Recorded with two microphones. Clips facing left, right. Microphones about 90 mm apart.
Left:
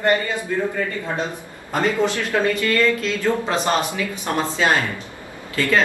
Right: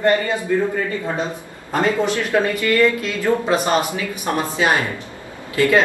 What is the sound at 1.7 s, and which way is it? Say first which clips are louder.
A man's voice: right 1 dB; 20° right (ahead or behind).